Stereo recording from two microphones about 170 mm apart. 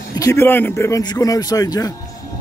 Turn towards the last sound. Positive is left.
turn(degrees=20)  # may be behind; listen again after turning